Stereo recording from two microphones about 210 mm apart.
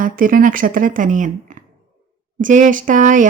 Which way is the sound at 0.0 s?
40° right (ahead or behind).